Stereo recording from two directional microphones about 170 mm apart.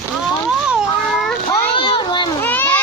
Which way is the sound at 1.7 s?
30° left (ahead or behind).